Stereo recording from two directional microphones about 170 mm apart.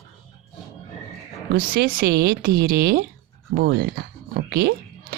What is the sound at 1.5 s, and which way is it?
Speech, 60° right (ahead or behind).